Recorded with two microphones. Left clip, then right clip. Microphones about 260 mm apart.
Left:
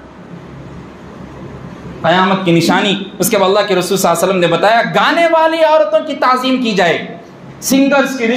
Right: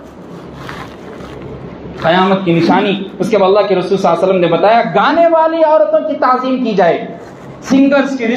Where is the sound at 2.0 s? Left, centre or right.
Left.